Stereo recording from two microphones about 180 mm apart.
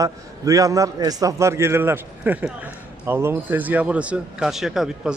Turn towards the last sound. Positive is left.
turn(degrees=-5)  # may be behind; listen again after turning